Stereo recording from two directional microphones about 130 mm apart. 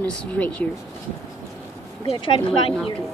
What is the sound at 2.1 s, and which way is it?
Speech, 45° left (ahead or behind).